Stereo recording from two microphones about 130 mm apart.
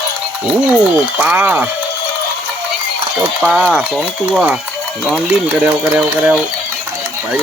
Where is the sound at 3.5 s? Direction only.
5° right (ahead or behind).